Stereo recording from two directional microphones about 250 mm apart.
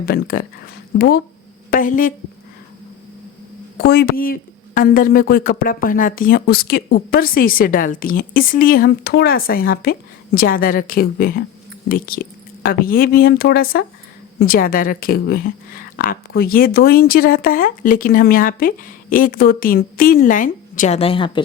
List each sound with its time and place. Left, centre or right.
0.0 s a woman's voice: left
3.8 s a woman's voice: left; by 21.4 s centre